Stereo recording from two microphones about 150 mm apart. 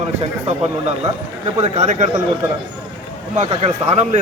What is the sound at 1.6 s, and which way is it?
Speech, 50° right (ahead or behind).